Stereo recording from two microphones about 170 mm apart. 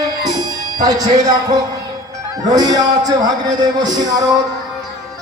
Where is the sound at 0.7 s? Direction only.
25° right (ahead or behind).